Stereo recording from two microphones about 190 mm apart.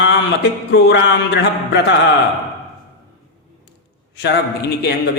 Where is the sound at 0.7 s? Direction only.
65° left (ahead or behind).